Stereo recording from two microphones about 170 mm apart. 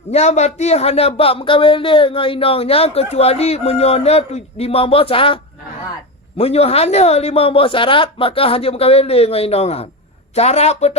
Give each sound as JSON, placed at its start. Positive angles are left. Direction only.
{"t": 0.1, "sound": "speech", "side_deg": 40}